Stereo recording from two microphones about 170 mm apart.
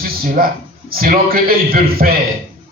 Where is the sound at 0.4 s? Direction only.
60° right (ahead or behind).